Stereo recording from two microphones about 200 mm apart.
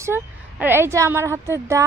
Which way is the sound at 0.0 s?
10° right (ahead or behind).